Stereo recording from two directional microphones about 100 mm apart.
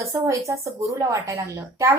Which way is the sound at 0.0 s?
30° right (ahead or behind).